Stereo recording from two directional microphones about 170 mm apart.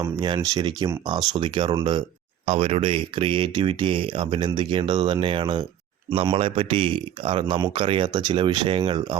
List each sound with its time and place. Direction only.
0.0 s speech: 25° right (ahead or behind)